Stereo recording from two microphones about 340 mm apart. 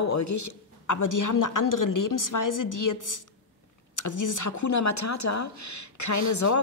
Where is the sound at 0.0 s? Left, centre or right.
Left.